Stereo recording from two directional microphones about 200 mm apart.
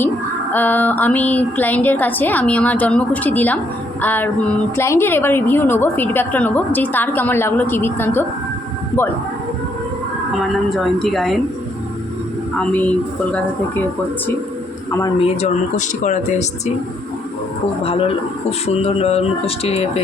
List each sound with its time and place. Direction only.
0.5 s a woman's voice: 10° left (ahead or behind)
10.5 s a woman's voice: centre (ahead or behind)
12.5 s a woman's voice: 5° left (ahead or behind)
15.2 s speech: 35° left (ahead or behind)
17.8 s speech: 30° left (ahead or behind)